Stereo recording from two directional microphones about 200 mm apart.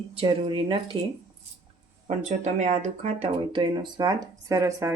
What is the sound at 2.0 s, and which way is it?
Speech, 35° right (ahead or behind).